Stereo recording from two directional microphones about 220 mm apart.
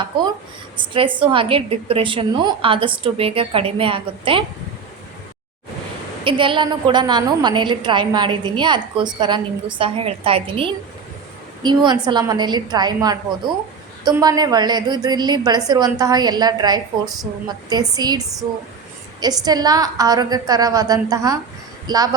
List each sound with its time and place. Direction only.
0.8 s a woman's voice: 25° right (ahead or behind)
6.2 s a woman's voice: 20° right (ahead or behind)